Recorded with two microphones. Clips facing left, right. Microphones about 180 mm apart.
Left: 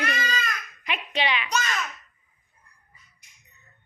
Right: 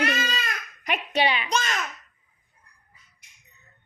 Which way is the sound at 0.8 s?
45° right (ahead or behind).